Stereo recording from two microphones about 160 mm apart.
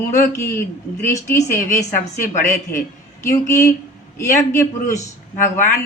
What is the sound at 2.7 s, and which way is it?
Speech, 70° left (ahead or behind).